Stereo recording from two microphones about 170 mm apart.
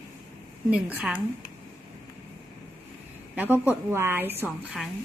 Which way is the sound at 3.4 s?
10° right (ahead or behind).